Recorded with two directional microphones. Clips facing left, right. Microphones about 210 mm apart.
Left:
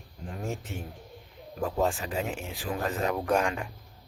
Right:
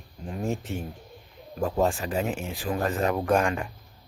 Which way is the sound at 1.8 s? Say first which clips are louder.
Right 3 dB; 45° right (ahead or behind).